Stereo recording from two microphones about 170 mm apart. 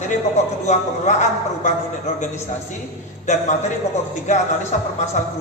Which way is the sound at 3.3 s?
45° left (ahead or behind).